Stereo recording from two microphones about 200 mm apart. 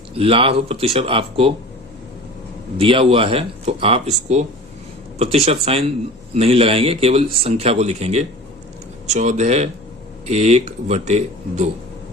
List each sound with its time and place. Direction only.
0.1 s speech: 30° right (ahead or behind)
2.7 s speech: 25° right (ahead or behind)